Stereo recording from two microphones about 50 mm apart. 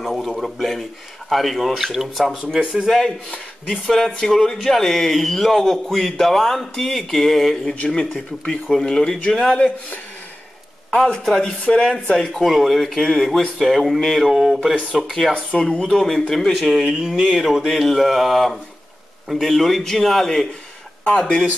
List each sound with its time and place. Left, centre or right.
0.0 s a man's voice: centre
2.6 s speech: centre
3.6 s speech: centre
7.8 s speech: left
11.0 s speech: centre
11.6 s speech: left
12.4 s speech: centre
14.2 s speech: centre
15.5 s speech: centre
16.8 s speech: centre